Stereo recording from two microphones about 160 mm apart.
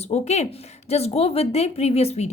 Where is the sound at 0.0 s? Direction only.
45° left (ahead or behind).